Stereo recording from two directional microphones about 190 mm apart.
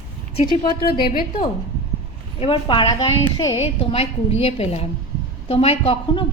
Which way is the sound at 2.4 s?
25° left (ahead or behind).